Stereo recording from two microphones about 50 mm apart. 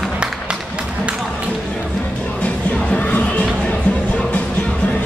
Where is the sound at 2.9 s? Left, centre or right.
Left.